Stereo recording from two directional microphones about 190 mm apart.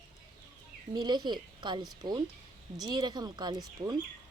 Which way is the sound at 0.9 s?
25° right (ahead or behind).